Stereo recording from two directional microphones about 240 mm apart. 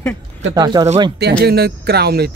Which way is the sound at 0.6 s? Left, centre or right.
Centre.